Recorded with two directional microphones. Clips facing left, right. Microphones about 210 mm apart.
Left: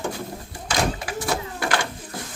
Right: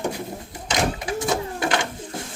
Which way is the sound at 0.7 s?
20° right (ahead or behind).